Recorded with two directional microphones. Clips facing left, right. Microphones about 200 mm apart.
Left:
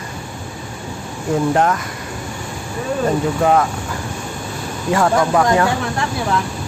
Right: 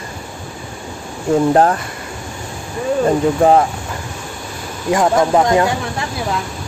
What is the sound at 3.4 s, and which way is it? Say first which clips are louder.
Speech: right 3 dB; 30° right (ahead or behind).